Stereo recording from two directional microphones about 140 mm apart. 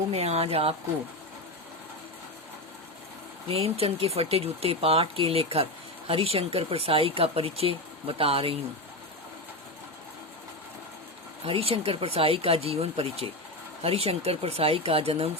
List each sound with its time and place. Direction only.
0.1 s speech: 45° right (ahead or behind)
3.5 s speech: 45° right (ahead or behind)
11.4 s speech: 40° right (ahead or behind)